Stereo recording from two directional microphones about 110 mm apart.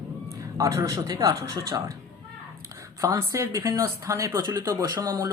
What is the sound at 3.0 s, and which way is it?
Speech, 30° right (ahead or behind).